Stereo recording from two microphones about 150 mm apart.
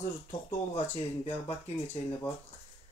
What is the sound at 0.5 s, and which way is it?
Speech, 50° left (ahead or behind).